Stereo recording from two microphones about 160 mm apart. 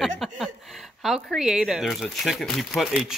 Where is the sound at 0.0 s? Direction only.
Centre (ahead or behind).